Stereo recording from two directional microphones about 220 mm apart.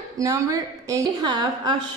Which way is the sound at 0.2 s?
15° right (ahead or behind).